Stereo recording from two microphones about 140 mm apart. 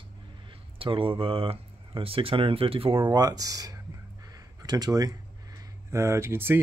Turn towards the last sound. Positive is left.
turn(degrees=-15)  # may be behind; listen again after turning